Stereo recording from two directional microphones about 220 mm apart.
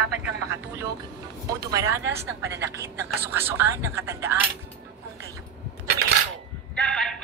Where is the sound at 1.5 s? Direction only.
15° right (ahead or behind).